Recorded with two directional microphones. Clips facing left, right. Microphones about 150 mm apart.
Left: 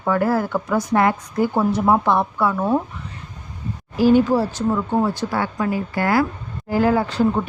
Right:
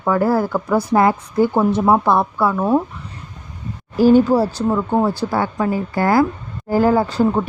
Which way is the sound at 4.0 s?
45° right (ahead or behind).